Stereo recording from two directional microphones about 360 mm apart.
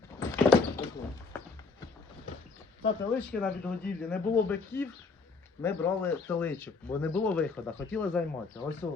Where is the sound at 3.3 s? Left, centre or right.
Centre.